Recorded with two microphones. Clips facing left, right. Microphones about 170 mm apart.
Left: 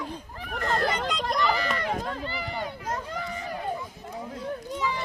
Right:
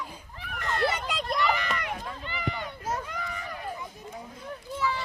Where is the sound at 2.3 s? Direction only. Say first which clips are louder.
Left 1 dB; 35° left (ahead or behind).